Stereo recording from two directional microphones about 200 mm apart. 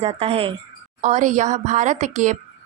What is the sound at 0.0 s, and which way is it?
A woman's voice, 30° right (ahead or behind).